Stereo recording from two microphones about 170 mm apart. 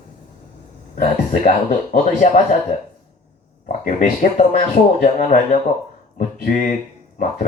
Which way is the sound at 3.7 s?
50° left (ahead or behind).